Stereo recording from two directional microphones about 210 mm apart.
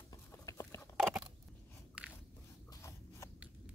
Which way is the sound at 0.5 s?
15° left (ahead or behind).